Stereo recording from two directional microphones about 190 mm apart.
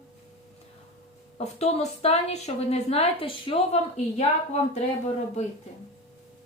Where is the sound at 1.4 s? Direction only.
35° left (ahead or behind).